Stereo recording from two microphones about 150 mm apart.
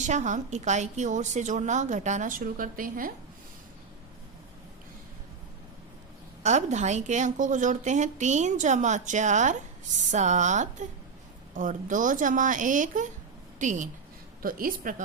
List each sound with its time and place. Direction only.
0.0 s a woman's voice: 55° right (ahead or behind)
6.4 s a woman's voice: 50° right (ahead or behind)
14.4 s a woman's voice: 70° right (ahead or behind)